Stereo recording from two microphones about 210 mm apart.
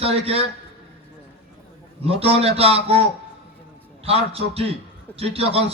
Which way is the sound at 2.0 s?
30° right (ahead or behind).